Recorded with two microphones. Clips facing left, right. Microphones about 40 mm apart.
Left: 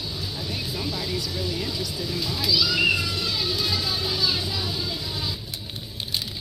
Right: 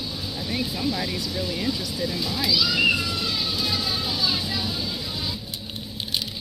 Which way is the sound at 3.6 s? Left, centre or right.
Right.